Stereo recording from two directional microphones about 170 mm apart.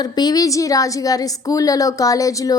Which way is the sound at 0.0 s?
25° left (ahead or behind).